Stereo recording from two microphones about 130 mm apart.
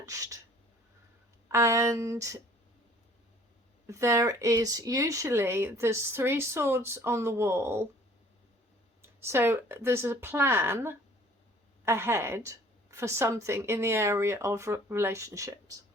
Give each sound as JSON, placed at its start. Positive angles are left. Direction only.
{"t": 0.0, "sound": "a sound", "side_deg": -25}
{"t": 1.5, "sound": "speech", "side_deg": -20}
{"t": 3.8, "sound": "speech", "side_deg": -20}
{"t": 9.0, "sound": "speech", "side_deg": -20}